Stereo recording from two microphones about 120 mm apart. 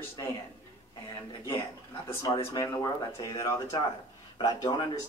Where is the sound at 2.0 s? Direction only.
45° left (ahead or behind).